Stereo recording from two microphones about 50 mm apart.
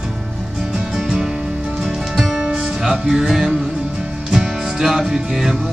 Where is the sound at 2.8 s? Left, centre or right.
Centre.